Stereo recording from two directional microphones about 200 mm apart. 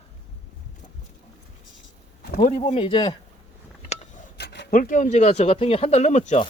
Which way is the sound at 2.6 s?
30° left (ahead or behind).